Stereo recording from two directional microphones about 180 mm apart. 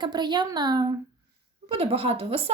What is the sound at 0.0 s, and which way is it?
Speech, 25° right (ahead or behind).